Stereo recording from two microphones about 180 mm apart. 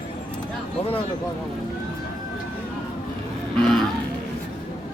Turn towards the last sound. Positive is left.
turn(degrees=5)  # may be behind; listen again after turning